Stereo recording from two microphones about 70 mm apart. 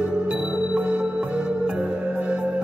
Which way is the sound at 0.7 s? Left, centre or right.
Right.